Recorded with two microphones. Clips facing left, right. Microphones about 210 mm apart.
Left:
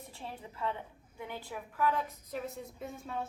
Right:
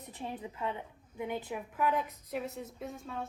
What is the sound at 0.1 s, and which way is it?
A woman's voice, 15° right (ahead or behind).